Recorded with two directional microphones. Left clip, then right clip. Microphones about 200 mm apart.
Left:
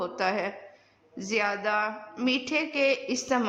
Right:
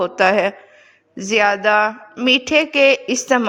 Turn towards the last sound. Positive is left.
turn(degrees=-40)  # may be behind; listen again after turning